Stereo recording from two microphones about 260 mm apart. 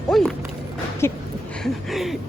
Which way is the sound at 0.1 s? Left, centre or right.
Centre.